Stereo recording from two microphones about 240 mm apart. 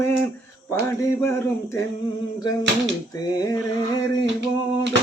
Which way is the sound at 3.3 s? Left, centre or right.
Centre.